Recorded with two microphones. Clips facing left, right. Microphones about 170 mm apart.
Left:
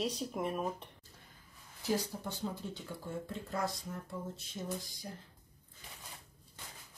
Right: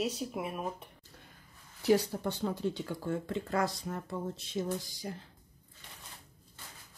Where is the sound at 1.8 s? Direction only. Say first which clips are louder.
Right 8 dB; 65° right (ahead or behind); by 5.1 s 85° right.